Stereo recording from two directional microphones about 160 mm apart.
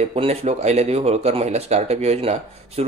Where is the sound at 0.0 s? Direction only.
40° right (ahead or behind).